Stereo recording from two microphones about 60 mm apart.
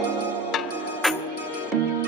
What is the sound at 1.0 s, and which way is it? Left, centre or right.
Music, centre.